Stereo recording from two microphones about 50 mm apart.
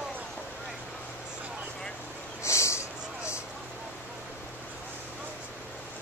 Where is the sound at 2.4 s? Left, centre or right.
Left.